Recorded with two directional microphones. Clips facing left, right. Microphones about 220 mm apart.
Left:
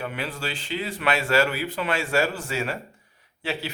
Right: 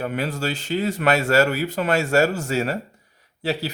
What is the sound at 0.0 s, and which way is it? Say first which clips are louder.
Speech: right 6 dB; 40° right (ahead or behind).